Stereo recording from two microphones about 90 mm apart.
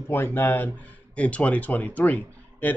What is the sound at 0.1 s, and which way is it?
Speech, 25° left (ahead or behind).